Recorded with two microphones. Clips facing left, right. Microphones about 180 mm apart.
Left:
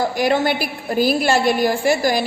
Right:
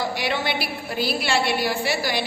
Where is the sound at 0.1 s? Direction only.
45° left (ahead or behind).